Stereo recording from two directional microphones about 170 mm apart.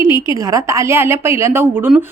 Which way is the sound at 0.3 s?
20° right (ahead or behind).